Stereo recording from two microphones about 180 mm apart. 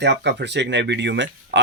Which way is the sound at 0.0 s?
70° right (ahead or behind).